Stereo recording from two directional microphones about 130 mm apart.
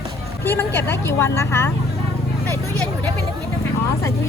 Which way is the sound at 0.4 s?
15° left (ahead or behind).